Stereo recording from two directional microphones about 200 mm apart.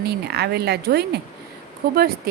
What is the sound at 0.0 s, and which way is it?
A woman's voice, 55° right (ahead or behind).